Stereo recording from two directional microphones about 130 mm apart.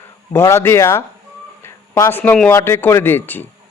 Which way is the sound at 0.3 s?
20° left (ahead or behind).